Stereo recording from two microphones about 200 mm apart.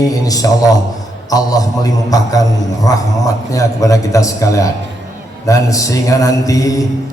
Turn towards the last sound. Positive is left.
turn(degrees=15)  # may be behind; listen again after turning